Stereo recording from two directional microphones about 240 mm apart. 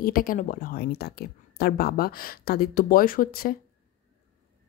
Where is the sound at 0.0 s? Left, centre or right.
Left.